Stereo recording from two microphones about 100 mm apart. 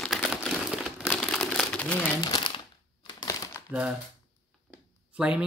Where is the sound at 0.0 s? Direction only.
5° left (ahead or behind).